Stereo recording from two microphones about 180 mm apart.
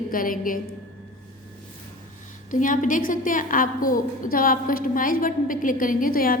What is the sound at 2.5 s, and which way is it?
Music, 45° left (ahead or behind).